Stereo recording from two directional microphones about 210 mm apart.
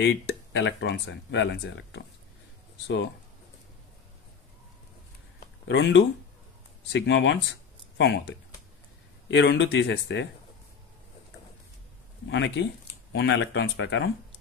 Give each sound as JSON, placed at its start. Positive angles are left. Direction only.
{"t": 0.0, "sound": "speech", "side_deg": 60}
{"t": 5.7, "sound": "speech", "side_deg": 60}
{"t": 12.3, "sound": "speech", "side_deg": 60}